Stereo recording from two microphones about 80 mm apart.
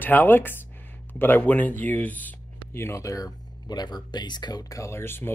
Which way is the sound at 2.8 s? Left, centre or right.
Left.